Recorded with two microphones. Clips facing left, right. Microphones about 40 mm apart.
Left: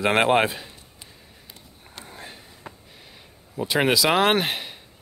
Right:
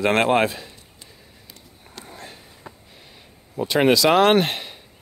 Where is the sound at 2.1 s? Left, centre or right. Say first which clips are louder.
Right 1 dB; centre.